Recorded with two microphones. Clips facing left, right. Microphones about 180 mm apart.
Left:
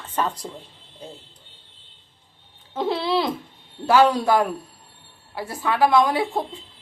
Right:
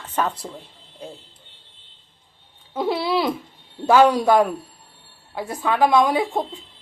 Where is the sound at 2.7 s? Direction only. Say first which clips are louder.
Right 1 dB; 10° right (ahead or behind).